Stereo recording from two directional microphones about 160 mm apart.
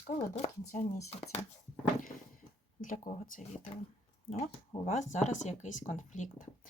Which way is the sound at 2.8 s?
60° left (ahead or behind).